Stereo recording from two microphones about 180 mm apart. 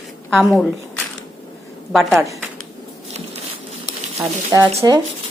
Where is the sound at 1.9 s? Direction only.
Centre (ahead or behind).